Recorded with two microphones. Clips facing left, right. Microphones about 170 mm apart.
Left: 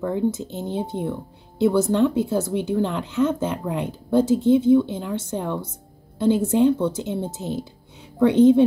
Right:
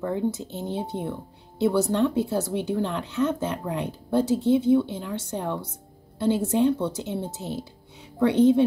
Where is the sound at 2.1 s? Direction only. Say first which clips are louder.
Left 3 dB; 20° left (ahead or behind).